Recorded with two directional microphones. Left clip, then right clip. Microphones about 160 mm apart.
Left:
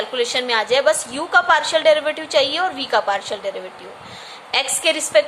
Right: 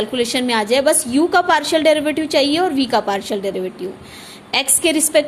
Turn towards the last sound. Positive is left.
turn(degrees=-35)  # may be behind; listen again after turning